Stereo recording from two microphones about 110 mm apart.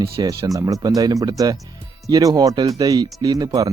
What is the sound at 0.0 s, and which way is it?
Speech, 35° right (ahead or behind).